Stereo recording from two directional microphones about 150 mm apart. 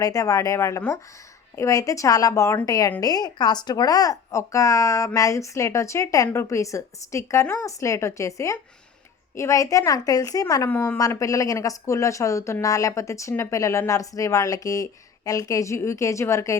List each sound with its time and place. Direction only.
0.0 s a woman's voice: 20° left (ahead or behind)